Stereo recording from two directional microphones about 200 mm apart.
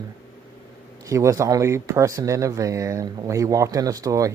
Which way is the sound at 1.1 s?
15° right (ahead or behind).